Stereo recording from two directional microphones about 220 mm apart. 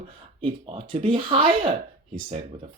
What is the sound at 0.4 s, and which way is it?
Speech, 25° right (ahead or behind).